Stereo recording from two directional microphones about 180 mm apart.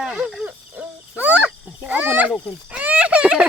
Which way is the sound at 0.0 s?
Centre (ahead or behind).